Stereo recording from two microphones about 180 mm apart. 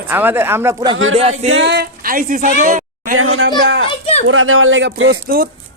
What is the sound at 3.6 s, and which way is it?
Speech, 85° right.